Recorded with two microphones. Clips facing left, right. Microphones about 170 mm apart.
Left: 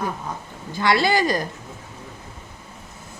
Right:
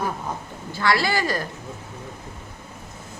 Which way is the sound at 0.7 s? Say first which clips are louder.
Left 3 dB; 20° left (ahead or behind).